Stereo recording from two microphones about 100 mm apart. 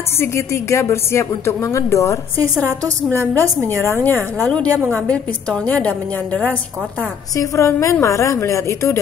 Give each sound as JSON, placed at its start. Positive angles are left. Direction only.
{"t": 0.2, "sound": "speech", "side_deg": 25}
{"t": 2.8, "sound": "a woman's voice", "side_deg": -30}
{"t": 4.0, "sound": "a woman's voice", "side_deg": 20}
{"t": 7.3, "sound": "speech", "side_deg": 30}